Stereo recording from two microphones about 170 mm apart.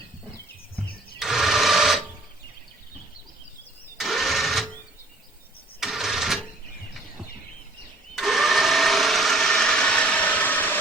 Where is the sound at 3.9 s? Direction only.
Centre (ahead or behind).